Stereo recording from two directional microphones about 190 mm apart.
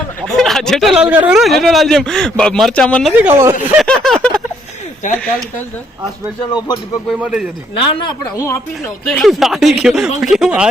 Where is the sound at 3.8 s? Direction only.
5° left (ahead or behind).